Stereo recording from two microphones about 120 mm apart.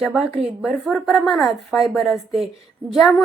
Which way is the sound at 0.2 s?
Centre (ahead or behind).